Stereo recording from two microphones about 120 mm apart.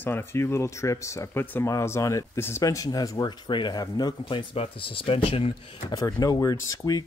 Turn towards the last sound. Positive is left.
turn(degrees=30)  # may be behind; listen again after turning